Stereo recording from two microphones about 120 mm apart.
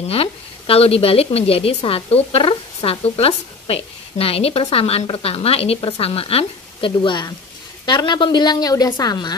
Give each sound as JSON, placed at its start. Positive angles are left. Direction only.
{"t": 0.1, "sound": "a woman's voice", "side_deg": 55}